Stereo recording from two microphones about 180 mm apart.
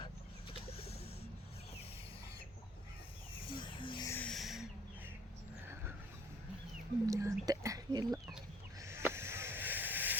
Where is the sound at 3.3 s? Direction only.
30° left (ahead or behind).